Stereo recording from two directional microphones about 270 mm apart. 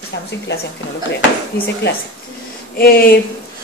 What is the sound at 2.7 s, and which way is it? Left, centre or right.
Speech, left.